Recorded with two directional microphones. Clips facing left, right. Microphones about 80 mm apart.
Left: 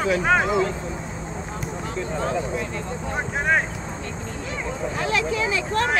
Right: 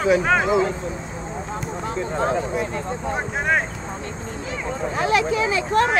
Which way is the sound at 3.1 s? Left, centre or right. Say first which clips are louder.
Even; centre.